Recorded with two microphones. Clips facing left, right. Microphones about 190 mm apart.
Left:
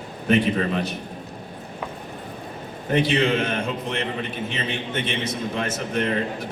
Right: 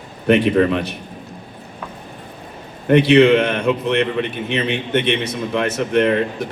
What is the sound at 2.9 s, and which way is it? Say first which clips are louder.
A man's voice: right 10 dB; 65° right (ahead or behind).